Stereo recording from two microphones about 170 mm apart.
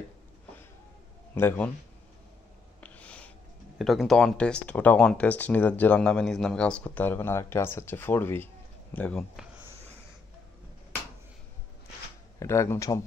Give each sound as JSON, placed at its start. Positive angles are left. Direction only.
{"t": 1.3, "sound": "speech", "side_deg": 15}
{"t": 2.8, "sound": "a sound", "side_deg": 10}
{"t": 3.7, "sound": "speech", "side_deg": 0}
{"t": 12.4, "sound": "speech", "side_deg": 15}